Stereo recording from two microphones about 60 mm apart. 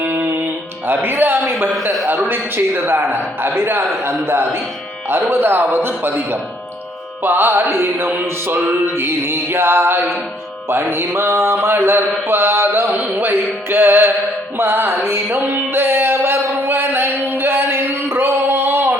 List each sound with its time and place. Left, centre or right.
0.0 s music: right
2.0 s a man's voice: right
15.1 s music: right